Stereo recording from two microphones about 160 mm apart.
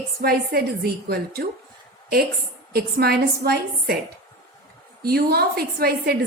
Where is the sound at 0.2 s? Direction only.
75° right (ahead or behind).